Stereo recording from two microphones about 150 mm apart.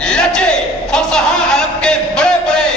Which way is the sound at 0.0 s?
5° left (ahead or behind).